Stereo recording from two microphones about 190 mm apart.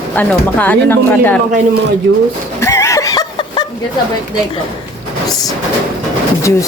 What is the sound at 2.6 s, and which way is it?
Snicker, 15° left (ahead or behind).